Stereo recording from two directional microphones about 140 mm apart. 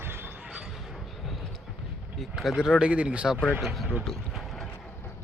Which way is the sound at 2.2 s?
Centre (ahead or behind).